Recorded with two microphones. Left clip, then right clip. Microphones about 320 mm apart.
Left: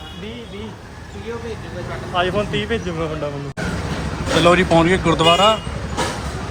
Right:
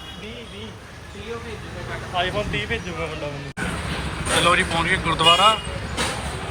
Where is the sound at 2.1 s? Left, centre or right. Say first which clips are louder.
Left 4 dB; left.